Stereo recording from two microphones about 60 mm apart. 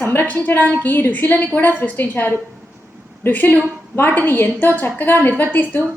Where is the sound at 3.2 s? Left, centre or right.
Left.